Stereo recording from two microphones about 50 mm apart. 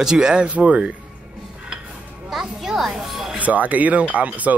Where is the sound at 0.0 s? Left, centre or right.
Centre.